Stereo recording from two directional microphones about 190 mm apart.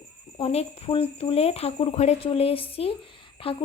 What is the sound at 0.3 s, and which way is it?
Speech, 25° left (ahead or behind).